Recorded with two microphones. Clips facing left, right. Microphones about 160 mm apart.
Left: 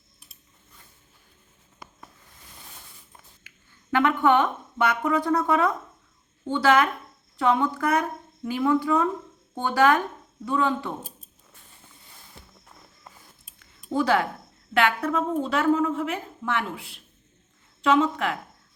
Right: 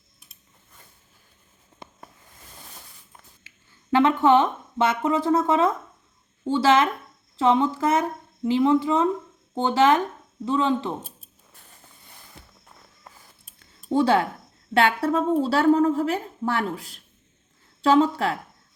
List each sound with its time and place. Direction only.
1.8 s a sound: 25° right (ahead or behind)
3.9 s speech: 25° right (ahead or behind)
13.9 s a woman's voice: 30° right (ahead or behind)